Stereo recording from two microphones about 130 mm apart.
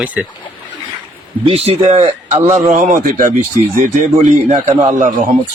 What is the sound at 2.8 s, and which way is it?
Speech, 90° right.